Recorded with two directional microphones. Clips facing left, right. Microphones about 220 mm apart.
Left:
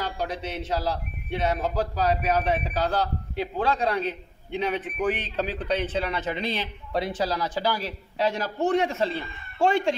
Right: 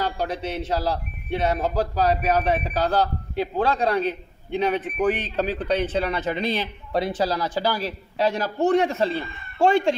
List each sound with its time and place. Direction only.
0.0 s speech: 35° right (ahead or behind)